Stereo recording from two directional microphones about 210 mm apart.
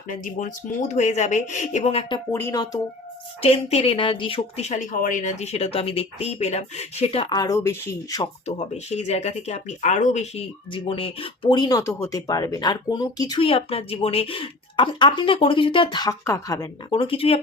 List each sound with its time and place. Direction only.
0.1 s speech: 40° left (ahead or behind); by 2.8 s 15° left (ahead or behind)
3.4 s speech: 30° left (ahead or behind)
8.4 s speech: 30° left (ahead or behind)